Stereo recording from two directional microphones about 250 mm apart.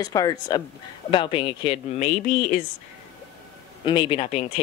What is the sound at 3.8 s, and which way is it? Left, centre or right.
Speech, centre.